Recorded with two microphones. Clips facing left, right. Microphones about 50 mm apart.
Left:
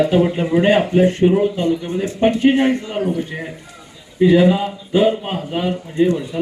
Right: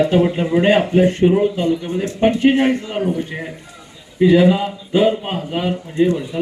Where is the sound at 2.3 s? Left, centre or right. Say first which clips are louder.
Even; centre.